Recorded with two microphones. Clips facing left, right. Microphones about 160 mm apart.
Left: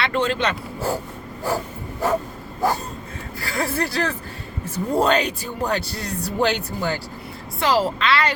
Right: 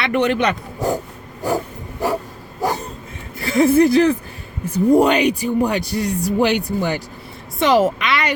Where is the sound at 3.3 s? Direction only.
20° right (ahead or behind).